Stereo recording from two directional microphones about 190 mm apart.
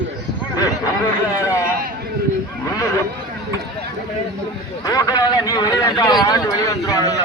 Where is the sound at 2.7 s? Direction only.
15° left (ahead or behind).